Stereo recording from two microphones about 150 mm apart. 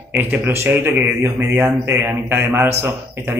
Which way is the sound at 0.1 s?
10° right (ahead or behind).